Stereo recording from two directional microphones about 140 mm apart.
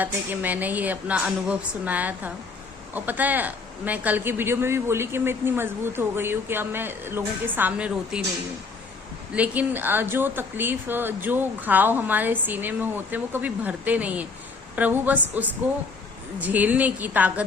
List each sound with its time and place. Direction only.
0.0 s a man's voice: 10° right (ahead or behind)
9.3 s a man's voice: 10° right (ahead or behind)